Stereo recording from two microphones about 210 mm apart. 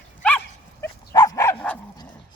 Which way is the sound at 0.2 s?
10° left (ahead or behind).